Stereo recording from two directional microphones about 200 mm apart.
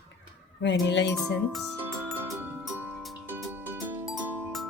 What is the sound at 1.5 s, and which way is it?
Music, 5° right (ahead or behind).